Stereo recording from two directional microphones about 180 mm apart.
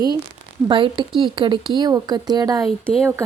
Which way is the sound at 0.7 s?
30° right (ahead or behind).